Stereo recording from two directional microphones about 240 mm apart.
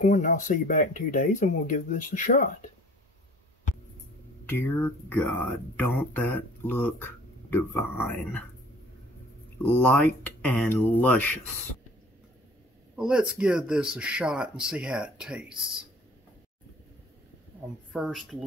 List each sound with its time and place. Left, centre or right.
0.0 s speech: left
4.5 s speech: centre
9.6 s speech: centre
12.9 s speech: centre
17.9 s speech: centre